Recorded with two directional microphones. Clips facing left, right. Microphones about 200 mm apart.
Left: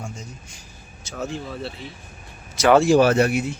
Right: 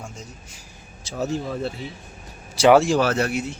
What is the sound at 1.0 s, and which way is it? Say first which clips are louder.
Speech: right 4 dB; 40° right (ahead or behind).